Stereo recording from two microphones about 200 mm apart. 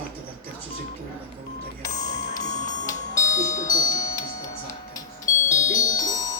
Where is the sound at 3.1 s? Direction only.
40° left (ahead or behind).